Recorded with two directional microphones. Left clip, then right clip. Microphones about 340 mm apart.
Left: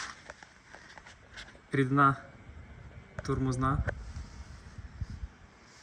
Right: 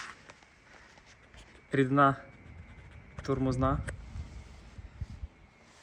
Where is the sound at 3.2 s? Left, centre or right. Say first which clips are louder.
Right 2 dB; centre.